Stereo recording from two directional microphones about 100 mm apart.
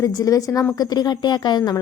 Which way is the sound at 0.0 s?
35° left (ahead or behind).